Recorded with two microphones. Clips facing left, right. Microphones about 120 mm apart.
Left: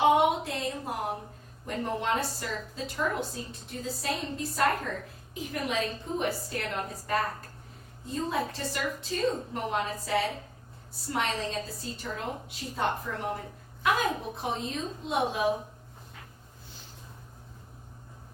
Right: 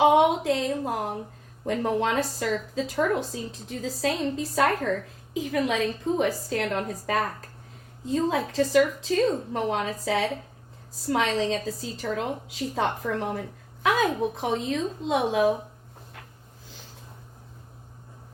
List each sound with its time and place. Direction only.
0.0 s a sound: 90° right
1.6 s a woman's voice: 90° right
8.0 s a woman's voice: 90° right